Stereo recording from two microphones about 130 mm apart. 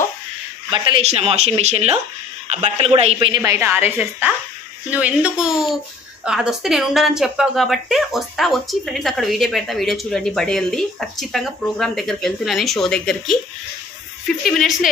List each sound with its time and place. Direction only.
0.7 s a man's voice: 40° right (ahead or behind)
1.0 s speech: 50° right (ahead or behind)
2.9 s a man's voice: 45° right (ahead or behind)
3.4 s a woman's voice: 15° right (ahead or behind); by 14.9 s 5° left (ahead or behind)